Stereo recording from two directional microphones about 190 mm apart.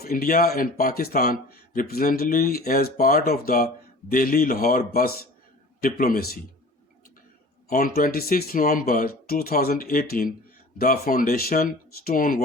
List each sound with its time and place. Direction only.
0.0 s speech: 50° left (ahead or behind)
7.7 s speech: 45° left (ahead or behind)